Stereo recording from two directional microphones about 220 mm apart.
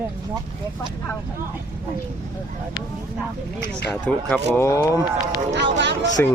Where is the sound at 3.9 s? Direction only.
10° left (ahead or behind).